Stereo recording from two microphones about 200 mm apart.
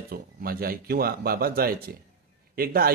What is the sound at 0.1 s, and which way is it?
Speech, 50° right (ahead or behind).